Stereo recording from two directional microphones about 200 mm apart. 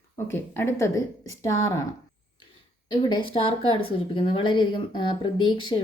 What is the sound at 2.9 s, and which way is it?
A woman's voice, 25° left (ahead or behind).